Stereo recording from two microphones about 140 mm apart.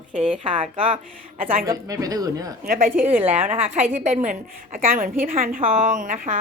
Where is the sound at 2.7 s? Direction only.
90° right.